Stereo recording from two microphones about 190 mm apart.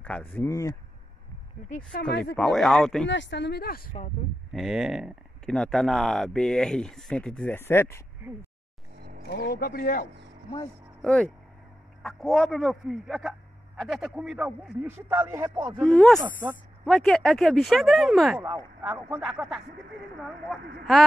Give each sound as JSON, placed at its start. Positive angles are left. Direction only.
{"t": 0.0, "sound": "speech", "side_deg": 10}
{"t": 2.3, "sound": "speech", "side_deg": 5}
{"t": 3.1, "sound": "speech", "side_deg": 70}
{"t": 4.5, "sound": "speech", "side_deg": 0}
{"t": 9.2, "sound": "speech", "side_deg": 55}
{"t": 11.1, "sound": "speech", "side_deg": 5}
{"t": 15.8, "sound": "speech", "side_deg": 5}
{"t": 16.2, "sound": "speech", "side_deg": -10}
{"t": 16.8, "sound": "speech", "side_deg": 5}